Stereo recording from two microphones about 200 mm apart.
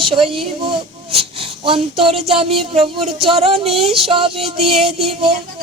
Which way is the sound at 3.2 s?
30° right (ahead or behind).